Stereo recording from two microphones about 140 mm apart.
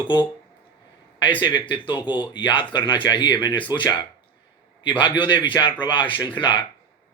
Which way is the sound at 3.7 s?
15° right (ahead or behind).